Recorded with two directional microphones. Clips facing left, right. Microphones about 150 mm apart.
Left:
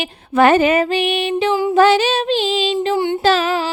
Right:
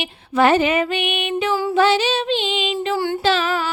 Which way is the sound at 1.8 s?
50° left (ahead or behind).